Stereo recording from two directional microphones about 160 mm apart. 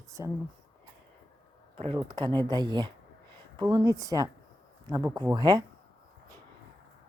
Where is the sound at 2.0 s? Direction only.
25° right (ahead or behind).